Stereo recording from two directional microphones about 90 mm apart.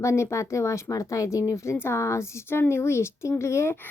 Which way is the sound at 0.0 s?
35° left (ahead or behind).